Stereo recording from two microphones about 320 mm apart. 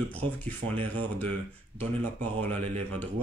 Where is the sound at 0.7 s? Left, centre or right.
Centre.